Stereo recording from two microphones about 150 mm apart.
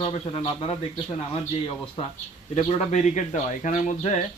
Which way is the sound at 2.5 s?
50° left (ahead or behind).